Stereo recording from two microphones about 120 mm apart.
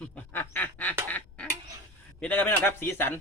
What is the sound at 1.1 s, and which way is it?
Duck, 10° left (ahead or behind).